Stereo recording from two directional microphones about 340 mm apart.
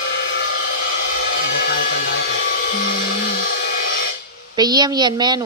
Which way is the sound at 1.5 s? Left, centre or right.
Left.